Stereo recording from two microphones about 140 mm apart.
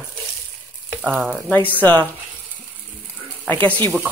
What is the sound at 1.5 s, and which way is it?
Speech, 10° left (ahead or behind).